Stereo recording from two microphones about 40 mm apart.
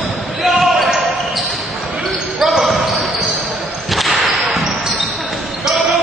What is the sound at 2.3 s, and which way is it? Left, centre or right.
Basketball bounce, centre.